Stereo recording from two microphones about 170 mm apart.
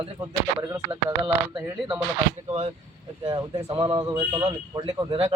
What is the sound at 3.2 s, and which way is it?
Speech, 20° right (ahead or behind).